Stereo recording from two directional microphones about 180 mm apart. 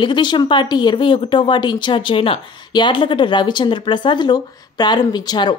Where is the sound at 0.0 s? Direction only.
25° left (ahead or behind).